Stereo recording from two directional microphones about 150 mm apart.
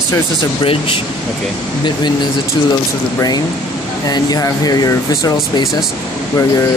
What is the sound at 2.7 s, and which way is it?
Speech, 25° left (ahead or behind).